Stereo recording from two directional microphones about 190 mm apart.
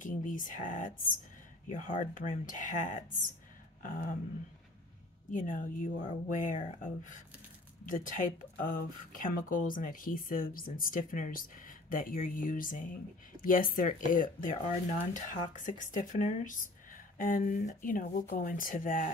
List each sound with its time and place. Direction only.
0.0 s speech: 45° left (ahead or behind)
5.3 s speech: 45° left (ahead or behind)